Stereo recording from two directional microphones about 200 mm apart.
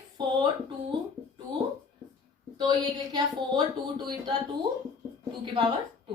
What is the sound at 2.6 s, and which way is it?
Speech, 20° right (ahead or behind).